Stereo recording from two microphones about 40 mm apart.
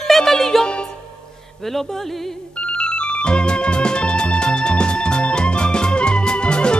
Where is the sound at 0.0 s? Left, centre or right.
Centre.